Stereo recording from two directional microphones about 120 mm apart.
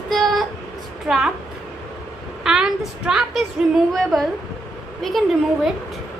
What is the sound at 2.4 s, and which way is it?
A woman's voice, 5° right (ahead or behind).